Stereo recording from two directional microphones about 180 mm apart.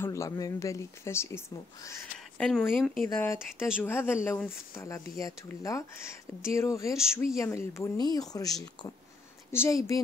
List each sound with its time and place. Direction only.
0.0 s speech: 15° left (ahead or behind)
2.3 s speech: 5° left (ahead or behind)
3.1 s speech: 15° left (ahead or behind)